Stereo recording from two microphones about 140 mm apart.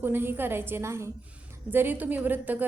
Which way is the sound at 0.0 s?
15° right (ahead or behind).